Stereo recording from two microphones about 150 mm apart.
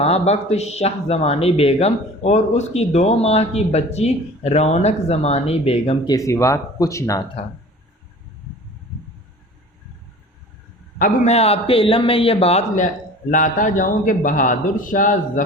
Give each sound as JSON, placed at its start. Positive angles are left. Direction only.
{"t": 0.0, "sound": "speech", "side_deg": 45}
{"t": 6.1, "sound": "speech", "side_deg": 20}
{"t": 11.3, "sound": "a man's voice", "side_deg": 45}